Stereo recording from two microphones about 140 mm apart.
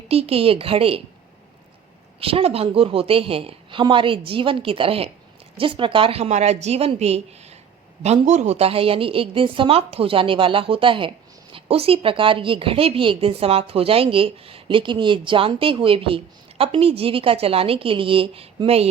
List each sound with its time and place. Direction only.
0.1 s a woman's voice: 45° right (ahead or behind)
2.2 s a woman's voice: 45° right (ahead or behind)